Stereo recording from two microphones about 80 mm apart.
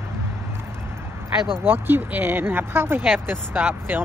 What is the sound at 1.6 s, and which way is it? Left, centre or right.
Speech, right.